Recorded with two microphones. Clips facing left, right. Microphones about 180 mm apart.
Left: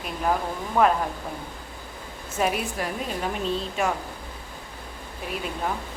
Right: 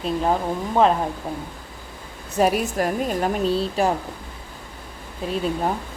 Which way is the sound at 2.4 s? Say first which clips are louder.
Right 6 dB; 40° right (ahead or behind).